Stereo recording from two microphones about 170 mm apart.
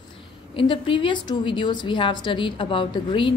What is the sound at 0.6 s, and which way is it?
A woman's voice, 30° left (ahead or behind).